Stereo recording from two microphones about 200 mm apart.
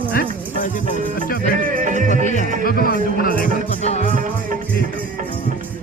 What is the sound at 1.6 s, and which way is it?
Music, 40° right (ahead or behind).